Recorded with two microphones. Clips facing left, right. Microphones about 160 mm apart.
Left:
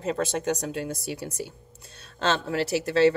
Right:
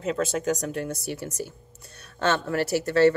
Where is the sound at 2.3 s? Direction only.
55° right (ahead or behind).